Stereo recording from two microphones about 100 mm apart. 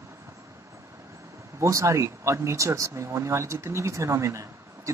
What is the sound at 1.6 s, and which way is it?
Speech, 30° right (ahead or behind).